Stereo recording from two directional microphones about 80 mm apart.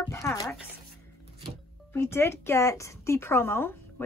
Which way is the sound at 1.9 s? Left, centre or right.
Left.